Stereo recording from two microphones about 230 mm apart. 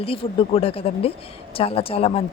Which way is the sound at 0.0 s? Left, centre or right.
Left.